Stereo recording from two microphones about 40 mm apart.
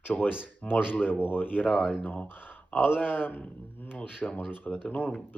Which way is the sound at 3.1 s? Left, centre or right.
Left.